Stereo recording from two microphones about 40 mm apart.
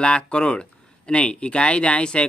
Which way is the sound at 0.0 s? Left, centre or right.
Left.